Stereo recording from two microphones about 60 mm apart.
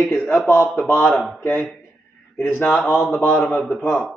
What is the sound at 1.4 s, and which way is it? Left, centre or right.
Speech, left.